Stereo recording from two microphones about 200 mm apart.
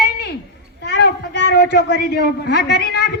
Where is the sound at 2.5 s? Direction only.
55° left (ahead or behind).